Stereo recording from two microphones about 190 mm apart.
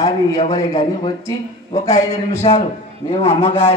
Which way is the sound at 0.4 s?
30° left (ahead or behind).